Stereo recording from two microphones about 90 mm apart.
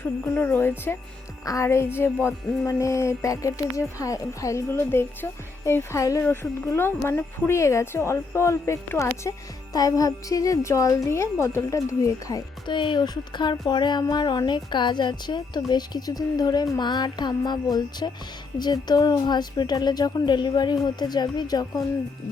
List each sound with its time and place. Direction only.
0.3 s speech: 20° left (ahead or behind); by 12.4 s 40° left (ahead or behind)
12.6 s a woman's voice: 60° left (ahead or behind)